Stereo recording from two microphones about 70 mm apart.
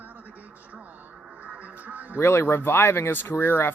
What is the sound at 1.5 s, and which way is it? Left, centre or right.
Music, right.